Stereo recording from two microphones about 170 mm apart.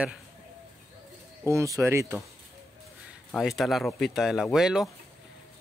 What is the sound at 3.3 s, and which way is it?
Speech, centre (ahead or behind).